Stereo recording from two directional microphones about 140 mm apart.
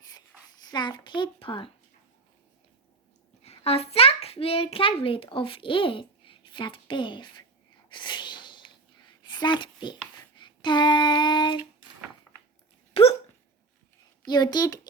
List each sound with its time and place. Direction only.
0.6 s a child's voice: 30° left (ahead or behind)
3.4 s a child's voice: 45° left (ahead or behind)
7.9 s a sound: 35° left (ahead or behind)
10.3 s child singing: 35° left (ahead or behind)
12.9 s hiccup: 45° left (ahead or behind)
14.3 s a child's voice: 30° left (ahead or behind)